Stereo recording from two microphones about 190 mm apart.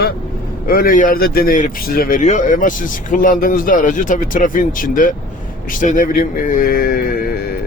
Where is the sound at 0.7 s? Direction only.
50° left (ahead or behind).